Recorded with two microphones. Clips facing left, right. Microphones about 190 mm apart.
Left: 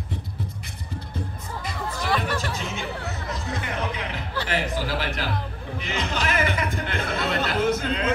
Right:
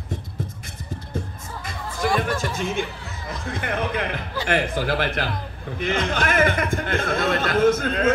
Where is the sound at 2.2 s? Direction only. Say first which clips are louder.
Right 3 dB; 50° right (ahead or behind).